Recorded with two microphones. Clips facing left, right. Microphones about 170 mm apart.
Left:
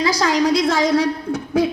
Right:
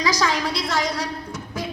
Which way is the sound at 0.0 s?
30° left (ahead or behind).